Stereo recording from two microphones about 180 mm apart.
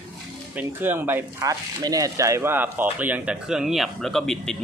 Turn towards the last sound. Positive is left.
turn(degrees=0)  # may be behind; listen again after turning